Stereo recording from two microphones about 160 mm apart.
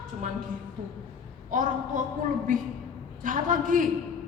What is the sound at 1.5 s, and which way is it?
A woman's voice, 55° right (ahead or behind).